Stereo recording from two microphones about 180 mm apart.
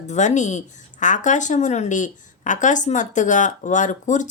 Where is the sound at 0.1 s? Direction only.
40° left (ahead or behind).